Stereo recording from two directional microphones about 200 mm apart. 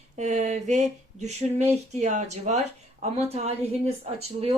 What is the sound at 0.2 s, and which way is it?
Speech, 35° right (ahead or behind).